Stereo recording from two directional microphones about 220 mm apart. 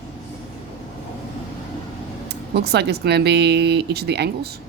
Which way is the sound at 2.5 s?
50° right (ahead or behind).